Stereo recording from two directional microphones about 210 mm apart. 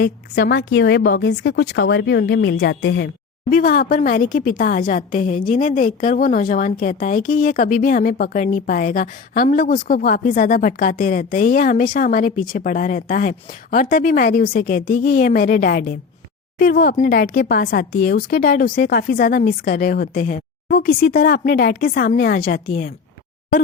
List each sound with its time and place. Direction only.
0.0 s a woman's voice: 55° left (ahead or behind)
3.5 s speech: 40° left (ahead or behind)